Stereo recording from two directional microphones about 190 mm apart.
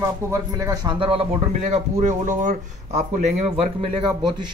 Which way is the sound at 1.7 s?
40° right (ahead or behind).